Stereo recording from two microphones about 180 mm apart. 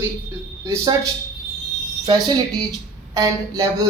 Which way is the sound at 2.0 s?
25° right (ahead or behind).